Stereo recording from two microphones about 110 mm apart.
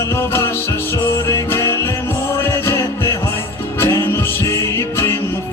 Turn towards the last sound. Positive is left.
turn(degrees=25)  # may be behind; listen again after turning